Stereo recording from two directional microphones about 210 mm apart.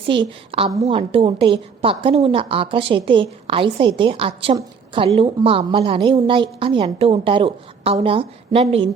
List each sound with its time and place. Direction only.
0.0 s a woman's voice: 25° right (ahead or behind)